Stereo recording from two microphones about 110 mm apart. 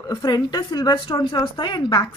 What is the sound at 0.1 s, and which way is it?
A woman's voice, 40° left (ahead or behind).